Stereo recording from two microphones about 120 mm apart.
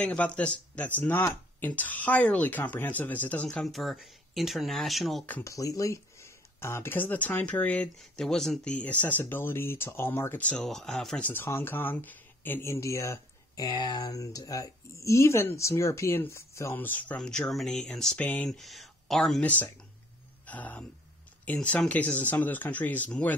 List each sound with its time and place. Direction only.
0.0 s speech: 10° left (ahead or behind)
3.6 s speech: centre (ahead or behind)
5.4 s speech: 25° left (ahead or behind)
10.6 s speech: 5° left (ahead or behind); by 13.7 s 25° left (ahead or behind)
13.7 s speech: 35° left (ahead or behind); by 18.2 s 5° left (ahead or behind)
18.2 s speech: 15° left (ahead or behind)
18.5 s speech: centre (ahead or behind)
20.4 s speech: 15° left (ahead or behind)